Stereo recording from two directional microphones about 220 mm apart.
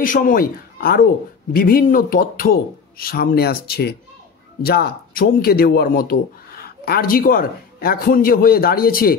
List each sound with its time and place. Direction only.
0.0 s speech: 40° left (ahead or behind)